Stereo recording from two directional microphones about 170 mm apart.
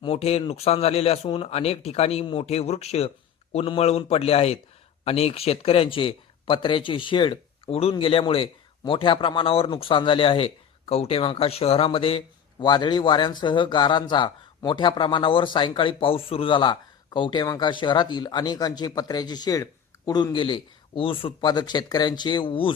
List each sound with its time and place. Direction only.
0.0 s a man's voice: 35° left (ahead or behind)